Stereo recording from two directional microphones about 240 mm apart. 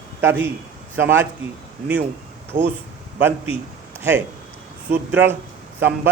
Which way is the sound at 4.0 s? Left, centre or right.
Centre.